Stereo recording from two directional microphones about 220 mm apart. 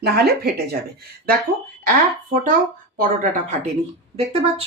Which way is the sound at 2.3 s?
40° right (ahead or behind).